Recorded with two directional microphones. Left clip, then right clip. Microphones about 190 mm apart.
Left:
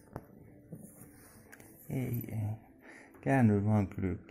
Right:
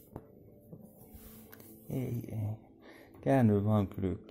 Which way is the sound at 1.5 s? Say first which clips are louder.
Even; centre (ahead or behind).